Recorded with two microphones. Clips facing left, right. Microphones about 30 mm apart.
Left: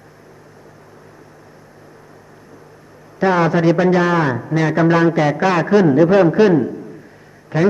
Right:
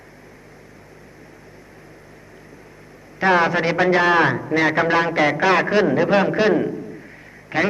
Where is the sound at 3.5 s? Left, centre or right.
Right.